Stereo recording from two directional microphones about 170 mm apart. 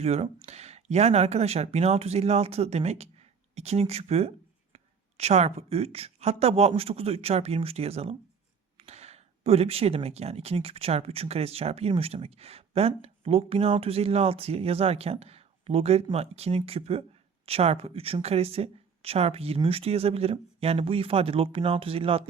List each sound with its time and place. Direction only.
0.0 s speech: 35° right (ahead or behind)